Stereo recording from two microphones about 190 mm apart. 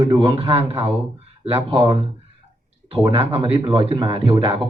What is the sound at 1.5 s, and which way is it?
A man's voice, 30° right (ahead or behind).